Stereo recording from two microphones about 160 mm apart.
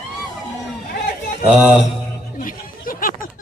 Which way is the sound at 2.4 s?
60° left (ahead or behind).